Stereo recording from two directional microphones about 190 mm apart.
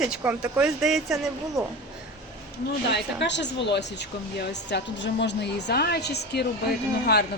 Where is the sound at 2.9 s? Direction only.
65° left (ahead or behind).